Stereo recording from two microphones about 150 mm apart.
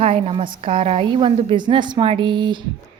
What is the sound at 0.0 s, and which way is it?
A woman's voice, 45° right (ahead or behind).